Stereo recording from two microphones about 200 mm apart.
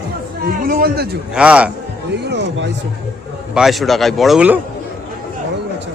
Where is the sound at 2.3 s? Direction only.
60° right (ahead or behind).